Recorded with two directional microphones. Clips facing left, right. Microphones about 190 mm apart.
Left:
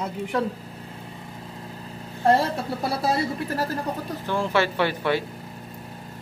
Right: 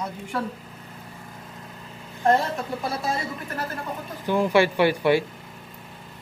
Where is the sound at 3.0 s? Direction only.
35° left (ahead or behind).